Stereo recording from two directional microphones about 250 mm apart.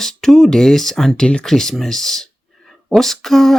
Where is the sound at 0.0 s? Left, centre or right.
Centre.